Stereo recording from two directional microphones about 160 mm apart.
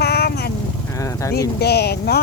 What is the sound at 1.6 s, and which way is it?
Speech, 90° left.